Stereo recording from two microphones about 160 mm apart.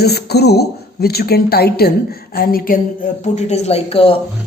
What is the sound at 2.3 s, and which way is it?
Speech, 70° left (ahead or behind).